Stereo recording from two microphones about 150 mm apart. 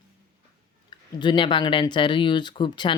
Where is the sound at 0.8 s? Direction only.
30° left (ahead or behind).